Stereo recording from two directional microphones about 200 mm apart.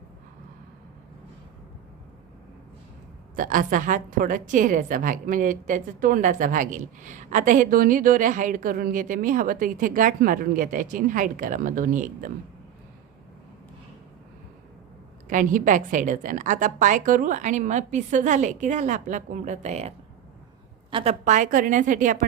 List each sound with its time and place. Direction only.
3.3 s a woman's voice: 40° right (ahead or behind)
15.3 s a woman's voice: 40° right (ahead or behind)
20.9 s a woman's voice: 30° right (ahead or behind)